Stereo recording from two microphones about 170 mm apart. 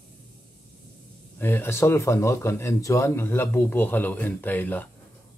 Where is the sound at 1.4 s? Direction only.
15° left (ahead or behind).